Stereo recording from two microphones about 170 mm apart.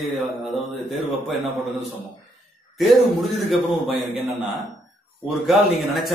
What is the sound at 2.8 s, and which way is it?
Speech, centre (ahead or behind).